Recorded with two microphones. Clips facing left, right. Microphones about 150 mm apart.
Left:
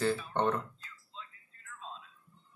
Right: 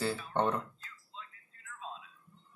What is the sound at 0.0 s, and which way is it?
Speech, 10° right (ahead or behind).